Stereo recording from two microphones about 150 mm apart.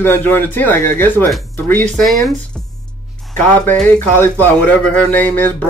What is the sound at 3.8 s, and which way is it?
Speech, 15° left (ahead or behind).